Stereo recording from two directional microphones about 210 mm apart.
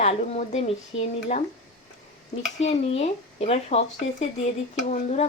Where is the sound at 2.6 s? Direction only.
30° left (ahead or behind).